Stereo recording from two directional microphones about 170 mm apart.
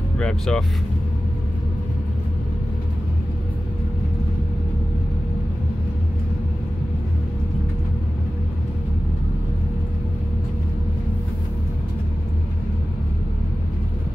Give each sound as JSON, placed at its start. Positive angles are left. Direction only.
{"t": 0.2, "sound": "speech", "side_deg": 5}